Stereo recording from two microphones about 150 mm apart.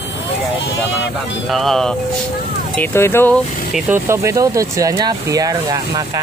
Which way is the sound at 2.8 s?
15° left (ahead or behind).